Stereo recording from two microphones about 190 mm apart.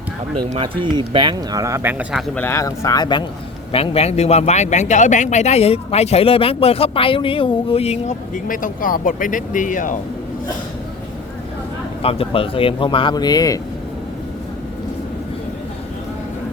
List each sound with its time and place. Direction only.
0.5 s speech: 25° right (ahead or behind); by 2.2 s 10° right (ahead or behind)
2.3 s a man's voice: 10° left (ahead or behind); by 10.0 s 45° left (ahead or behind)
12.0 s speech: 30° left (ahead or behind)